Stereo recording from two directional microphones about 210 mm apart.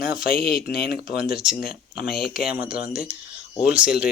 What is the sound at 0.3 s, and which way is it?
Speech, 45° left (ahead or behind).